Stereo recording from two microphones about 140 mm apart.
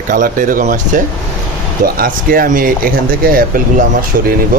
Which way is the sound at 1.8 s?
90° right.